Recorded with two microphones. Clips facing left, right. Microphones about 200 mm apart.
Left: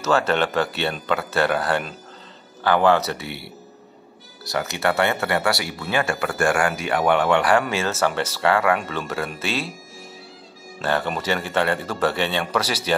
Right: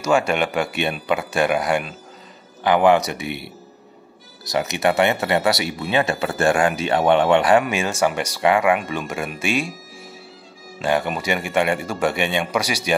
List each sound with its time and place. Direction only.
0.0 s speech: 10° right (ahead or behind)
10.8 s speech: 15° right (ahead or behind)